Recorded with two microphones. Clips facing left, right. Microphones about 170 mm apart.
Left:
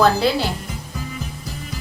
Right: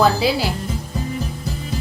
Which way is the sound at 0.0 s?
5° right (ahead or behind).